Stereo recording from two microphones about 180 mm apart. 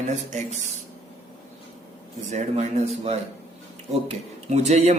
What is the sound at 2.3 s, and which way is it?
Speech, 40° right (ahead or behind).